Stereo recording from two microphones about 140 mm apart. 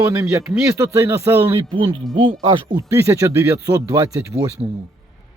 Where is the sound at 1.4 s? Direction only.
35° right (ahead or behind).